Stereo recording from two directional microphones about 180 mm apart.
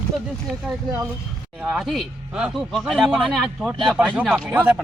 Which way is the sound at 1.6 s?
5° right (ahead or behind).